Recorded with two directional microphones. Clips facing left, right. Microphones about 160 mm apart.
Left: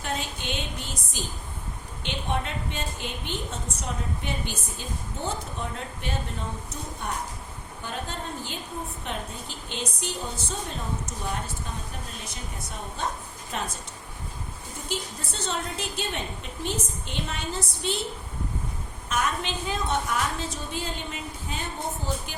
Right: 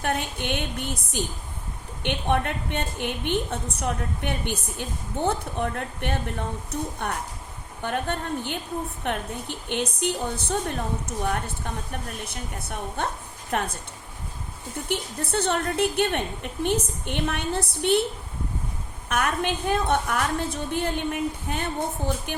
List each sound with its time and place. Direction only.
0.0 s a woman's voice: 60° right (ahead or behind)
14.8 s a woman's voice: 60° right (ahead or behind)
19.0 s a woman's voice: 60° right (ahead or behind)